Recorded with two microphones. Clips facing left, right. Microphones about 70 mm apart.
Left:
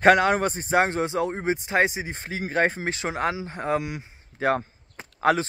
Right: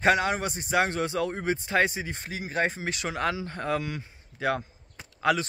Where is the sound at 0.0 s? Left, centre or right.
Left.